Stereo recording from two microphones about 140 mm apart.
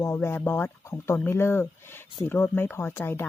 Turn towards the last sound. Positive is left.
turn(degrees=15)  # may be behind; listen again after turning